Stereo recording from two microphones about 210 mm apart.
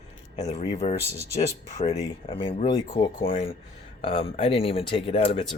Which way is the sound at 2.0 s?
25° left (ahead or behind).